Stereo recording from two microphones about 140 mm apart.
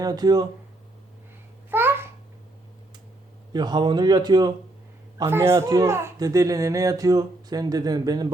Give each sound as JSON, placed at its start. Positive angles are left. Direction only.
{"t": 0.0, "sound": "a man's voice", "side_deg": -25}
{"t": 1.7, "sound": "babbling", "side_deg": -15}
{"t": 3.5, "sound": "a man's voice", "side_deg": -30}